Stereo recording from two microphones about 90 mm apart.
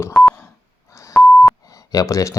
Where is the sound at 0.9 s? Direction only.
35° left (ahead or behind).